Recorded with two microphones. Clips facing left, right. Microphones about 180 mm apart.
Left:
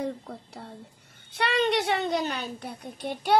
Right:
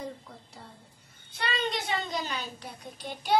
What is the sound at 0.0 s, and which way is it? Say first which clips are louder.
A child's voice: left 7 dB; 65° left (ahead or behind).